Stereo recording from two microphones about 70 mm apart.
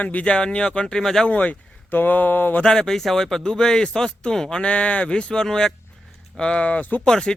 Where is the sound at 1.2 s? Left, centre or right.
Centre.